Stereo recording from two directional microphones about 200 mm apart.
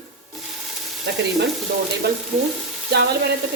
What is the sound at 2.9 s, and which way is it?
Speech, 55° right (ahead or behind).